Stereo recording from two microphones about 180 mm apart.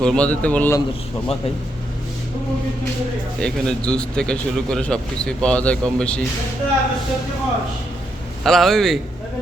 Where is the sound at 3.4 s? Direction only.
5° left (ahead or behind).